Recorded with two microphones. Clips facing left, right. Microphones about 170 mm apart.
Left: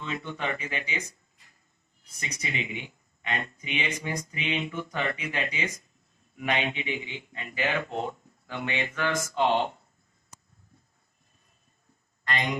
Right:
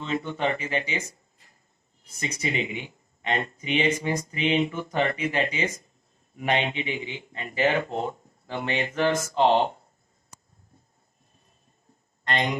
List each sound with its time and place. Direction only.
0.0 s speech: 35° right (ahead or behind)
2.0 s speech: 35° right (ahead or behind)
12.3 s speech: 30° right (ahead or behind)